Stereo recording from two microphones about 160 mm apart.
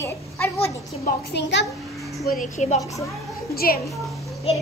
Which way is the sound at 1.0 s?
90° left.